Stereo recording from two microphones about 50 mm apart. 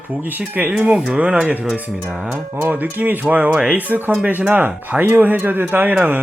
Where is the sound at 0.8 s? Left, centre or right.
Right.